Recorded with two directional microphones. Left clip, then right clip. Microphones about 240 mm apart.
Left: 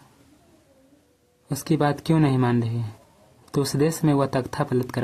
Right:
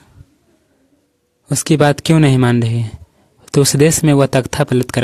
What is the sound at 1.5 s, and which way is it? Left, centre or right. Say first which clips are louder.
Speech: right 10 dB; right.